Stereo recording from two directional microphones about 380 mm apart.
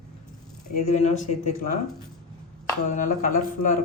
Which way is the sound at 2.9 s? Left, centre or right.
Centre.